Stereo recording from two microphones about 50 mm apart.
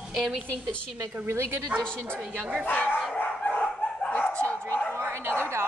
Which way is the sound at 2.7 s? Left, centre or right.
Left.